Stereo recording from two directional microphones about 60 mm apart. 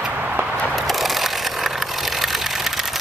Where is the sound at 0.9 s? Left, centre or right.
Centre.